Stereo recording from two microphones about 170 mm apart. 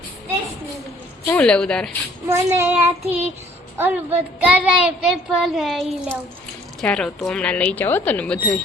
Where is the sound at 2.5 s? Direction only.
10° right (ahead or behind).